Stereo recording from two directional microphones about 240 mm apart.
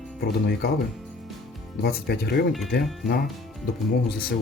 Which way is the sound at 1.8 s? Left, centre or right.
Left.